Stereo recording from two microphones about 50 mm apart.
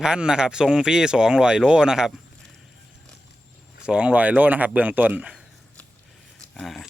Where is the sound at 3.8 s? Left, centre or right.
Right.